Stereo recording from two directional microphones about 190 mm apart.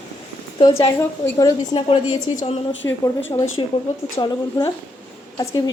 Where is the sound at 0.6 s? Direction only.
20° left (ahead or behind).